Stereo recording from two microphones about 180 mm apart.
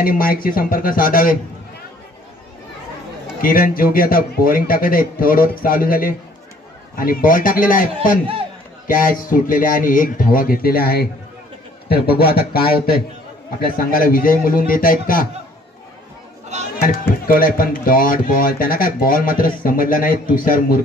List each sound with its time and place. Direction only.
0.0 s speech: 55° left (ahead or behind)
3.4 s speech: 50° left (ahead or behind)
16.5 s speech: 40° right (ahead or behind)
17.3 s speech: 50° left (ahead or behind)